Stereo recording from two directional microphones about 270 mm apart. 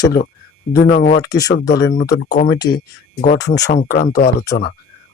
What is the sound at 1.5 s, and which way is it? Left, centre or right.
Speech, left.